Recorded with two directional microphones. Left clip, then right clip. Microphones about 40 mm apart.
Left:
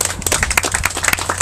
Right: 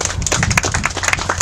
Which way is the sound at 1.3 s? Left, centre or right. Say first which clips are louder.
Right 1 dB; left.